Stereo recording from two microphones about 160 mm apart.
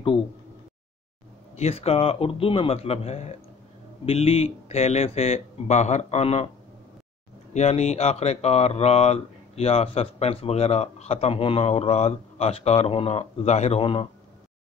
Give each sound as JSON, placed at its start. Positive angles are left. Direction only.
{"t": 1.6, "sound": "speech", "side_deg": 40}
{"t": 7.5, "sound": "speech", "side_deg": 45}